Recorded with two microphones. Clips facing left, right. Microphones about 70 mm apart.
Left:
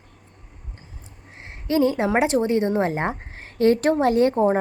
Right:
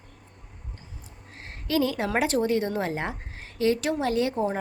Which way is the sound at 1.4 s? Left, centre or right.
Left.